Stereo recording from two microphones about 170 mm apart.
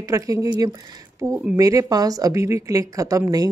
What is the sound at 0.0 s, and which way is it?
Speech, 20° right (ahead or behind).